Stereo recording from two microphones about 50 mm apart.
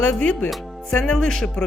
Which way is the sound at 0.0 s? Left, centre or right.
Left.